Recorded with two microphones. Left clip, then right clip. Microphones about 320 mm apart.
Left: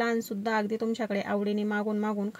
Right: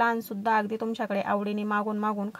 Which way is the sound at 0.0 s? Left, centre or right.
Right.